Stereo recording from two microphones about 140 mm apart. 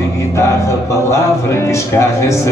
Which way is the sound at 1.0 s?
20° left (ahead or behind).